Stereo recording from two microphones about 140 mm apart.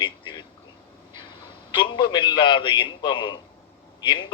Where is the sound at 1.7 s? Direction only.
35° left (ahead or behind).